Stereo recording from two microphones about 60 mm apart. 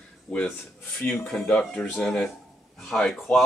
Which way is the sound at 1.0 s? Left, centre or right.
Left.